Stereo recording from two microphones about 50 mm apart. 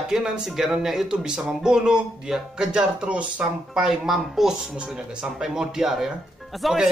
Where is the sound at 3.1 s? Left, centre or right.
Right.